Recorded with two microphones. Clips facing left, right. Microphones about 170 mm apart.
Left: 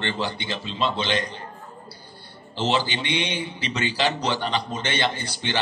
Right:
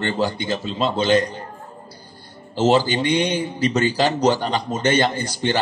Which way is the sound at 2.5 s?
45° right (ahead or behind).